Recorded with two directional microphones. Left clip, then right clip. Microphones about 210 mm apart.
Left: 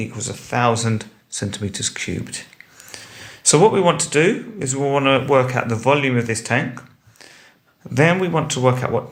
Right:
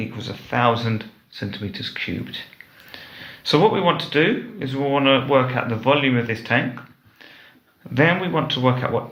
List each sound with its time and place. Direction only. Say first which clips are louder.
0.0 s speech: left 2 dB; 25° left (ahead or behind)
0.9 s speech: left 2 dB; 35° left (ahead or behind)
3.4 s speech: left 3 dB; 30° left (ahead or behind)
7.9 s speech: left 2 dB; 30° left (ahead or behind)